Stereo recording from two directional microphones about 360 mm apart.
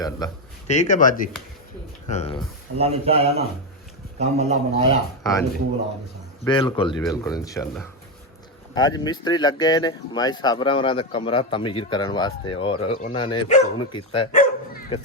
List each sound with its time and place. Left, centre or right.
0.7 s speech: centre
2.7 s a man's voice: centre
5.2 s speech: centre
6.4 s speech: centre